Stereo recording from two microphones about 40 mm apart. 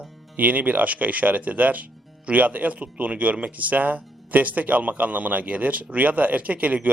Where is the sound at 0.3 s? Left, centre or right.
Right.